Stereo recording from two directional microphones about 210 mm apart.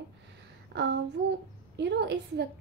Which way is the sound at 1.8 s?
55° right (ahead or behind).